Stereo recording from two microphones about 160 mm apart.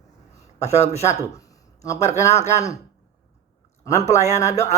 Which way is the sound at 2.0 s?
45° left (ahead or behind).